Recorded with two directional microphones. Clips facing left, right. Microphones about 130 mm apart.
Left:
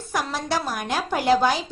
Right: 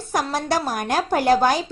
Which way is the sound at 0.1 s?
45° right (ahead or behind).